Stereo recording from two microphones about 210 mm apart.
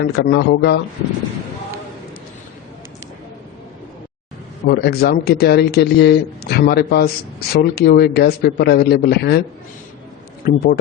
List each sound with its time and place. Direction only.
0.0 s speech: 50° left (ahead or behind)
4.7 s speech: 50° left (ahead or behind)
10.4 s speech: 45° left (ahead or behind)